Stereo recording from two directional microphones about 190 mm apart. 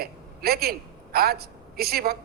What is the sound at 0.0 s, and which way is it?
A woman's voice, 55° right (ahead or behind).